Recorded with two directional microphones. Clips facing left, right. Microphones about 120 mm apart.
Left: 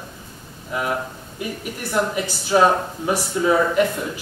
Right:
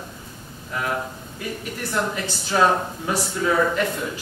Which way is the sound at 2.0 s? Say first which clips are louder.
Left 4 dB; 15° left (ahead or behind).